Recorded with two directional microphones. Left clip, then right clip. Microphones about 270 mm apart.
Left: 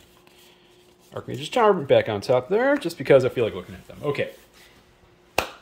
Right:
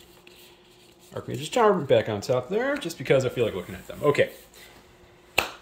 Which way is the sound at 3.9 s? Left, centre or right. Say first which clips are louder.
Right 5 dB; centre.